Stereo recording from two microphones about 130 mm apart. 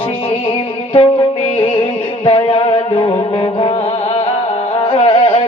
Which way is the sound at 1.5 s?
45° left (ahead or behind).